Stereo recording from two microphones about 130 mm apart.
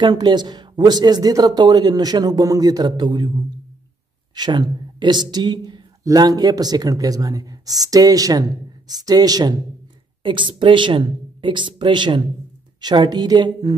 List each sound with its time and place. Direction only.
0.0 s speech: 35° right (ahead or behind)
4.4 s speech: 35° right (ahead or behind)